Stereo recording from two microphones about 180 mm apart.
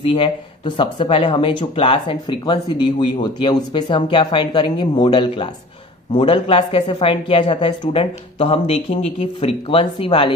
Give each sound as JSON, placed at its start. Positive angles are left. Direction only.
{"t": 0.0, "sound": "a woman's voice", "side_deg": 30}